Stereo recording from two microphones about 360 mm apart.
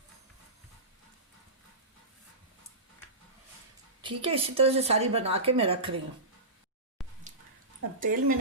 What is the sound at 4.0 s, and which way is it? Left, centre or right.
A woman's voice, centre.